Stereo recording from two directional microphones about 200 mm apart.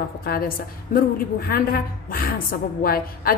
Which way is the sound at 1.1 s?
45° left (ahead or behind).